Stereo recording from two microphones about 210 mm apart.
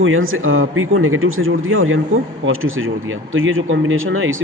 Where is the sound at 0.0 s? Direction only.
70° right (ahead or behind).